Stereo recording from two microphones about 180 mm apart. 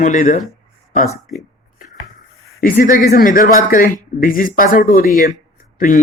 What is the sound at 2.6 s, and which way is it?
Speech, 50° left (ahead or behind).